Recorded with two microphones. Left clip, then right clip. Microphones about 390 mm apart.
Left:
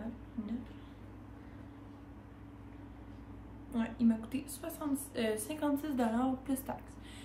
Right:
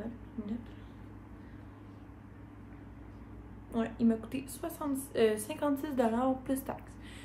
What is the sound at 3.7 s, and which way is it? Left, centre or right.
Speech, centre.